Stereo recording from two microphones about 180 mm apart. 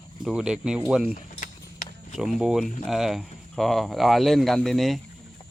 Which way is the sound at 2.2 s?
Centre (ahead or behind).